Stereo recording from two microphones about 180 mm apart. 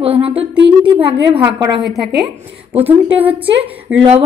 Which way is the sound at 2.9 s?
10° right (ahead or behind).